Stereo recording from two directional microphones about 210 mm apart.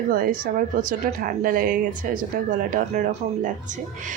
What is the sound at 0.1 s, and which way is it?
Speech, 40° right (ahead or behind).